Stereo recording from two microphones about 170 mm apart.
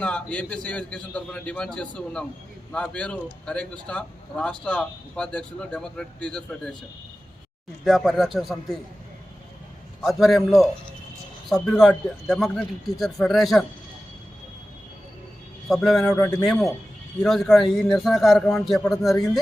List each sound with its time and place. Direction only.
0.0 s a man's voice: 5° left (ahead or behind)
7.9 s speech: centre (ahead or behind)
10.0 s speech: centre (ahead or behind)
15.7 s speech: centre (ahead or behind)
16.1 s a man's voice: 15° left (ahead or behind)
16.5 s speech: centre (ahead or behind)